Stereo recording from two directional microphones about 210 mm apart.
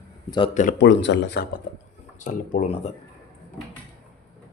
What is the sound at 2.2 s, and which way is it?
Speech, 35° left (ahead or behind).